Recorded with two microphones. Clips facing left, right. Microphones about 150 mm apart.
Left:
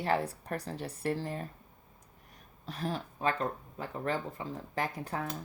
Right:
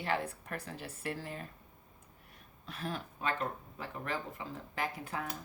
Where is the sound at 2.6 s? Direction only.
35° left (ahead or behind).